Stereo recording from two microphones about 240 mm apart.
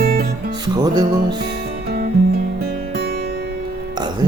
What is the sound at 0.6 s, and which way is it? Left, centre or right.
Speech, centre.